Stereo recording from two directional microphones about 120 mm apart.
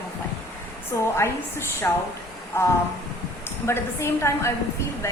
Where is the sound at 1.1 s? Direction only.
20° left (ahead or behind).